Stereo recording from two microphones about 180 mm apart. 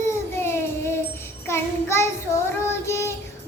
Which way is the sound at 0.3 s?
15° left (ahead or behind).